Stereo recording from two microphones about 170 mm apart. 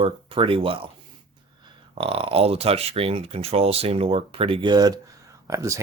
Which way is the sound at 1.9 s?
30° right (ahead or behind).